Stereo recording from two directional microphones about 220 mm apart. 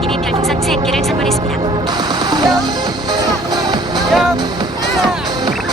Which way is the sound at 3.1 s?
20° right (ahead or behind).